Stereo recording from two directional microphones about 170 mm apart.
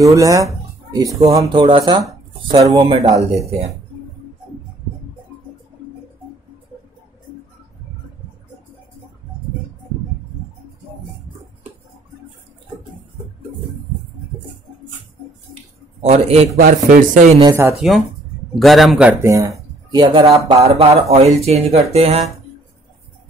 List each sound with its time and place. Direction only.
0.0 s speech: 20° right (ahead or behind)
16.0 s a man's voice: 40° right (ahead or behind)
16.5 s speech: 55° right (ahead or behind)
17.4 s speech: 20° right (ahead or behind)
17.7 s a man's voice: centre (ahead or behind)
19.3 s speech: 20° right (ahead or behind)
20.6 s a man's voice: 35° right (ahead or behind)